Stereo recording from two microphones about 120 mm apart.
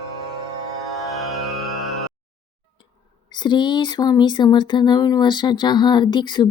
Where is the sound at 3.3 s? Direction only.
40° left (ahead or behind).